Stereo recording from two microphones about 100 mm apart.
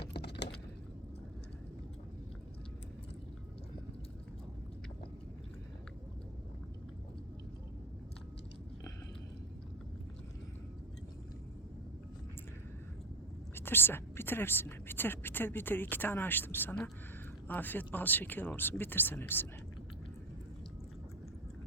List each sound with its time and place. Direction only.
13.6 s speech: 20° left (ahead or behind)